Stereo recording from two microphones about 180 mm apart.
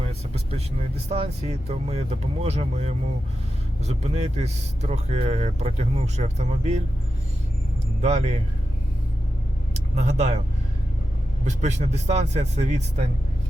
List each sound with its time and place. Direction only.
0.0 s speech: 35° right (ahead or behind)
8.0 s speech: 35° right (ahead or behind)
9.7 s speech: 40° right (ahead or behind)
11.4 s speech: 40° right (ahead or behind)